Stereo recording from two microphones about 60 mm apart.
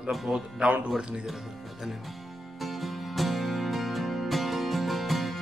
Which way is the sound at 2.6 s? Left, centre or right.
Centre.